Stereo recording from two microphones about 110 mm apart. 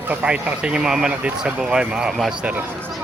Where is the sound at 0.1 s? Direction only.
10° right (ahead or behind).